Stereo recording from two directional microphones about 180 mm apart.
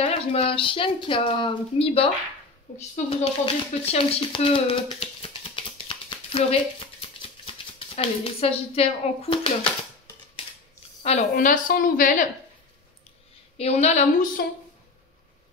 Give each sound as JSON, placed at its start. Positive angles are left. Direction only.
{"t": 0.0, "sound": "a woman's voice", "side_deg": 30}
{"t": 11.0, "sound": "a woman's voice", "side_deg": 35}
{"t": 11.3, "sound": "a woman's voice", "side_deg": 50}
{"t": 13.6, "sound": "a woman's voice", "side_deg": 35}
{"t": 14.4, "sound": "speech", "side_deg": 60}